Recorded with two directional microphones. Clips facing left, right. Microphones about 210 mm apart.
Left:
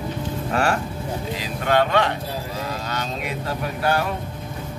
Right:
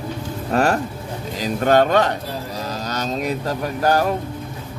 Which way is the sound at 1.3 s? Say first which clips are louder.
Right 5 dB; 40° right (ahead or behind).